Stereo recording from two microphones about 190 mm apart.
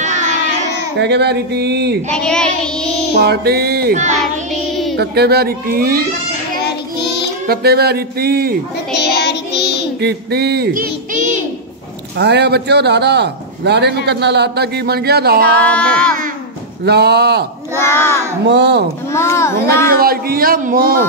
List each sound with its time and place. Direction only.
0.0 s a sound: 40° right (ahead or behind)
0.9 s a man's voice: 60° right (ahead or behind)
2.1 s child singing: 5° left (ahead or behind)
3.2 s a man's voice: 55° right (ahead or behind)
7.4 s a man's voice: 55° right (ahead or behind)
8.9 s child singing: 60° left (ahead or behind)
9.9 s speech: 60° right (ahead or behind)
12.2 s a man's voice: 60° right (ahead or behind)
15.6 s a child's voice: 5° left (ahead or behind)
16.8 s a man's voice: 60° right (ahead or behind)
17.7 s a child's voice: 15° left (ahead or behind)
18.5 s a man's voice: 60° right (ahead or behind)
19.1 s a child's voice: 15° left (ahead or behind)
19.9 s a man's voice: 50° right (ahead or behind)